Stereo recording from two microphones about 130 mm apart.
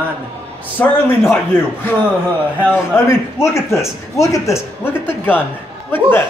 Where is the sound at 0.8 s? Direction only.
15° left (ahead or behind).